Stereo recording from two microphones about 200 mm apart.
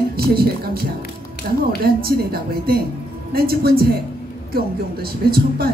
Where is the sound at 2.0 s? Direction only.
50° right (ahead or behind).